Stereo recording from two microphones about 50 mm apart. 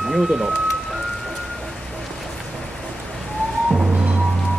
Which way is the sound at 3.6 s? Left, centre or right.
Centre.